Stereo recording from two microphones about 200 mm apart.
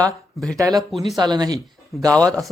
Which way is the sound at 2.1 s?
5° left (ahead or behind).